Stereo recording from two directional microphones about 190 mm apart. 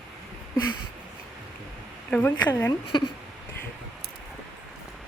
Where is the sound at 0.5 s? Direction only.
20° left (ahead or behind).